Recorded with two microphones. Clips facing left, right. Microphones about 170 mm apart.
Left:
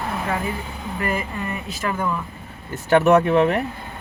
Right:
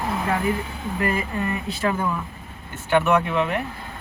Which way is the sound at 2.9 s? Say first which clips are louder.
Left 5 dB; 40° left (ahead or behind).